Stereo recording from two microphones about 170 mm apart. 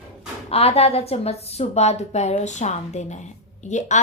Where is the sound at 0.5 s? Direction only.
35° left (ahead or behind).